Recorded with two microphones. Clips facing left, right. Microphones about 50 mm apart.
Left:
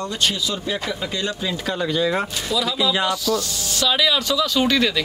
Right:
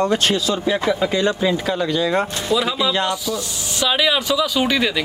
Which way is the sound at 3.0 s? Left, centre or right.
Centre.